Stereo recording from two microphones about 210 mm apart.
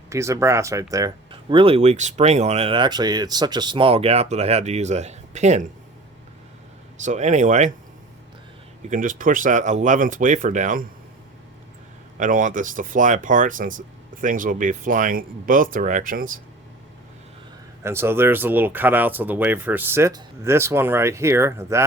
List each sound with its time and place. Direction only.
0.1 s speech: 15° right (ahead or behind); by 5.6 s 35° right (ahead or behind)
7.0 s speech: 35° right (ahead or behind)
8.9 s speech: 40° right (ahead or behind)
12.1 s speech: 40° right (ahead or behind)
17.8 s speech: 10° right (ahead or behind)